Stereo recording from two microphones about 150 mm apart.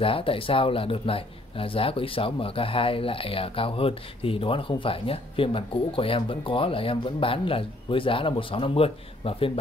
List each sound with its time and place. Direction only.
0.0 s speech: 35° left (ahead or behind)